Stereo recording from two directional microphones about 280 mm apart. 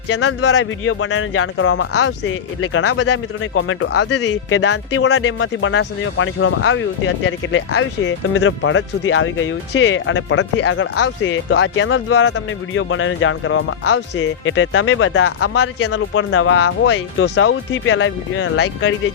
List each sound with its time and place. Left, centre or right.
0.1 s speech: left